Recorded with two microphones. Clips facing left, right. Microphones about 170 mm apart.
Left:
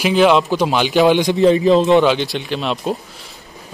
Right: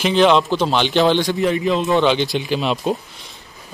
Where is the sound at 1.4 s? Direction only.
30° left (ahead or behind).